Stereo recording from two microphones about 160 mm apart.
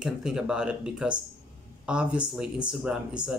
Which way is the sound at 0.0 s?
5° right (ahead or behind).